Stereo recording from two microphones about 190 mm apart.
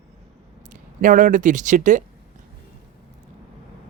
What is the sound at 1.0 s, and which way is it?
Speech, 45° right (ahead or behind).